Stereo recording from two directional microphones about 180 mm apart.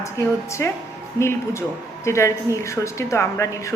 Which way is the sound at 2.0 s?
15° left (ahead or behind).